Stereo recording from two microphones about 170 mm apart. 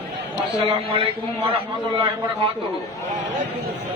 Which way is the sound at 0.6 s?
35° right (ahead or behind).